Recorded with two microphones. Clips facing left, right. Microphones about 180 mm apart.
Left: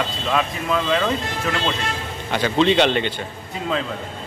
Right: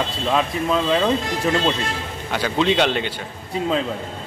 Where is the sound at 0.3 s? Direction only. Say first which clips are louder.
Right 2 dB; 25° right (ahead or behind).